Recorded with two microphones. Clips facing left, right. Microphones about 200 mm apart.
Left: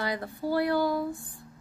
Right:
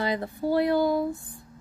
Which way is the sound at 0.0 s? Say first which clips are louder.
Right 4 dB; 20° right (ahead or behind).